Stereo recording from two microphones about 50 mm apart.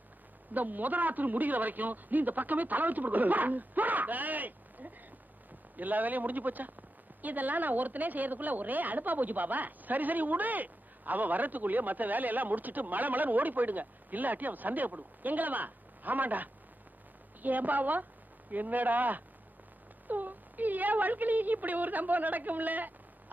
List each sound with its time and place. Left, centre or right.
0.5 s a woman's voice: right